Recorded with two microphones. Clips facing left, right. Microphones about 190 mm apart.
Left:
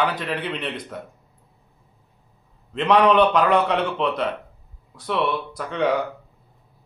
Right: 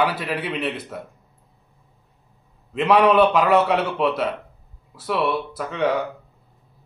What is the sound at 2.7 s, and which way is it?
A man's voice, 5° right (ahead or behind).